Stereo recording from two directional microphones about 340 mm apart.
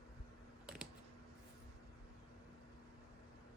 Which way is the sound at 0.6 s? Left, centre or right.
Centre.